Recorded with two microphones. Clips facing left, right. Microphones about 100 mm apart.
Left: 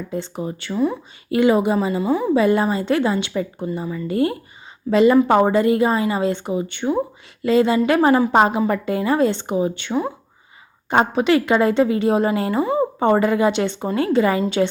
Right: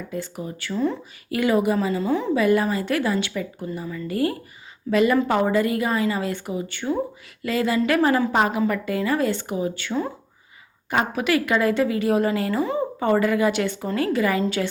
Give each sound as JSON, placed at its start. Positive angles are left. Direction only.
{"t": 0.1, "sound": "a woman's voice", "side_deg": 25}
{"t": 2.3, "sound": "a woman's voice", "side_deg": 25}